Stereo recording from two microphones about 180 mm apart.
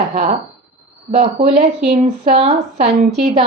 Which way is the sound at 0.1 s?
40° right (ahead or behind).